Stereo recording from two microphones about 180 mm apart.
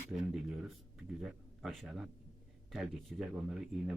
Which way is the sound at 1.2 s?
Centre (ahead or behind).